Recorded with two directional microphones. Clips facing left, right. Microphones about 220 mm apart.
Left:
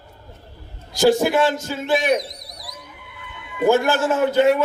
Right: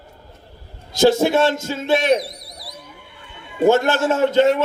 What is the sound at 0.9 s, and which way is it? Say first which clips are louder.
A man's voice: right 1 dB; 25° right (ahead or behind).